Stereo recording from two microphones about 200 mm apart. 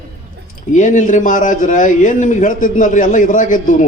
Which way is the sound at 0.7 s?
40° left (ahead or behind).